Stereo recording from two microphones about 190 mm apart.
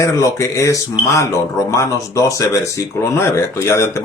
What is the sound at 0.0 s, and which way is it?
Speech, 15° left (ahead or behind).